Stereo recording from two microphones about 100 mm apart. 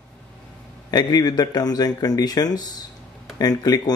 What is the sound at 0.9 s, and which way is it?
A man's voice, 40° left (ahead or behind).